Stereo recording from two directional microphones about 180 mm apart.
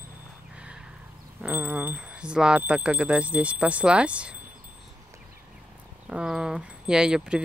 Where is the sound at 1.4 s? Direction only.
10° right (ahead or behind).